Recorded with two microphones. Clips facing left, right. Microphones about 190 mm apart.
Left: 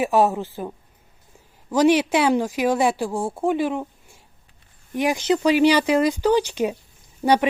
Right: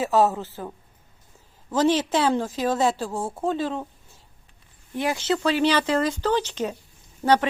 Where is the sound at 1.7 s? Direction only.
15° left (ahead or behind).